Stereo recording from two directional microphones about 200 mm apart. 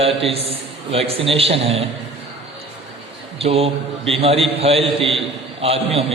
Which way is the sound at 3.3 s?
30° right (ahead or behind).